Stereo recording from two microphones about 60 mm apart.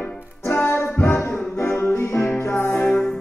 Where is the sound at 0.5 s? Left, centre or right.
Left.